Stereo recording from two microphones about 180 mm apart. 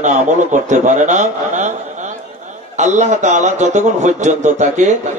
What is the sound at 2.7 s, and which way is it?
A man's voice, 40° right (ahead or behind).